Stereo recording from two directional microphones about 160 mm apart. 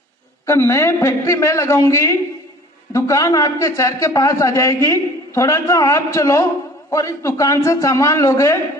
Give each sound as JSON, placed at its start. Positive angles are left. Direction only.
{"t": 0.5, "sound": "a man's voice", "side_deg": 20}